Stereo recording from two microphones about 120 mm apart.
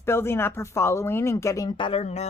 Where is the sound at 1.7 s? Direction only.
40° left (ahead or behind).